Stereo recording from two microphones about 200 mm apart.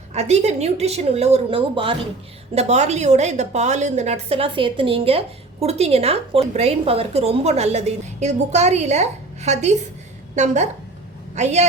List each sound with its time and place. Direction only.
0.1 s a woman's voice: 35° right (ahead or behind)